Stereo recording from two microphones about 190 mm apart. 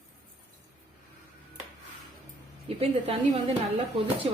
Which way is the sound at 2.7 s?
30° right (ahead or behind).